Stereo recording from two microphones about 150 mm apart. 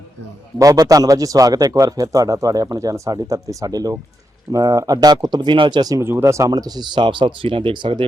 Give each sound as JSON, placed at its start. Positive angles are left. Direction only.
{"t": 0.6, "sound": "speech", "side_deg": -25}